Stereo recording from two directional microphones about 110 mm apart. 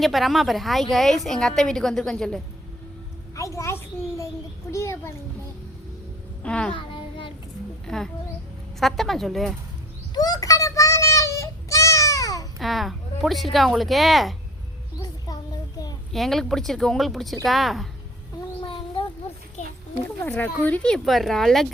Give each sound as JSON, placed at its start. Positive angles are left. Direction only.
{"t": 0.0, "sound": "a woman's voice", "side_deg": 0}
{"t": 3.3, "sound": "a child's voice", "side_deg": 30}
{"t": 6.4, "sound": "a child's voice", "side_deg": 10}
{"t": 6.7, "sound": "child singing", "side_deg": 50}
{"t": 7.9, "sound": "a woman's voice", "side_deg": 5}
{"t": 10.2, "sound": "a sound", "side_deg": 35}
{"t": 12.5, "sound": "a woman's voice", "side_deg": 0}
{"t": 16.1, "sound": "a woman's voice", "side_deg": 0}
{"t": 18.6, "sound": "a sound", "side_deg": 50}
{"t": 20.1, "sound": "a woman's voice", "side_deg": 15}